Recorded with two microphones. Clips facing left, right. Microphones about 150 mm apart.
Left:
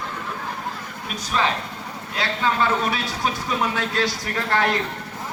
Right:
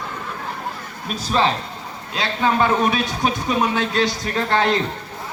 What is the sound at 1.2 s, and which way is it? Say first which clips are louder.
Speech: right 4 dB; 30° right (ahead or behind).